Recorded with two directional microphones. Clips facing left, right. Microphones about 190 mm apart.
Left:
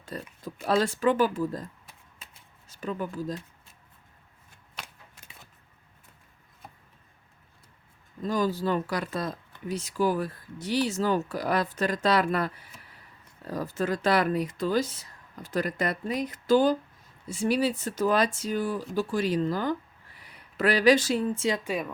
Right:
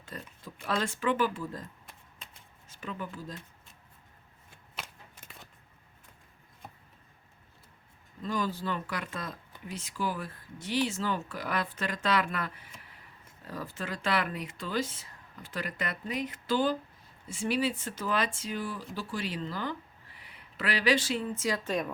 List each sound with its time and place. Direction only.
0.0 s speech: 40° left (ahead or behind)
2.6 s speech: 40° left (ahead or behind)
4.8 s shuffling cards: 10° left (ahead or behind)
8.2 s speech: 40° left (ahead or behind)
13.5 s speech: 40° left (ahead or behind)
21.3 s speech: 25° left (ahead or behind)
21.6 s speech: 10° left (ahead or behind)